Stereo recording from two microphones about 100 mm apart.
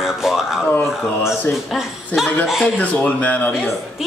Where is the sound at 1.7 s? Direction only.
Centre (ahead or behind).